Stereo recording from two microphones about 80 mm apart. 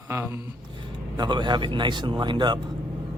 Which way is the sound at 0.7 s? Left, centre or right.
Right.